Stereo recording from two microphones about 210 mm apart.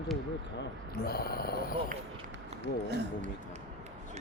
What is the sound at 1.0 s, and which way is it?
Speech, 45° left (ahead or behind).